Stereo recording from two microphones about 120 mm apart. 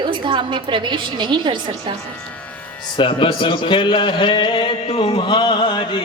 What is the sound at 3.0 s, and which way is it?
A man's voice, 45° left (ahead or behind).